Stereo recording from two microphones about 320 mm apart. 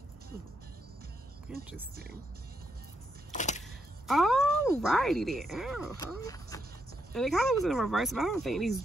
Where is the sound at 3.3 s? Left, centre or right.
Left.